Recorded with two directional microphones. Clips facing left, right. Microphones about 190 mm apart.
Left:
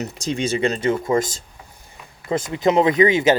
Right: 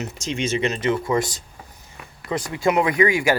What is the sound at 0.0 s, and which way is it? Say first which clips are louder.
Speech: left 2 dB; 35° left (ahead or behind).